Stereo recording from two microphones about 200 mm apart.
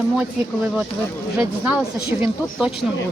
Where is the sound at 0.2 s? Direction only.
5° right (ahead or behind).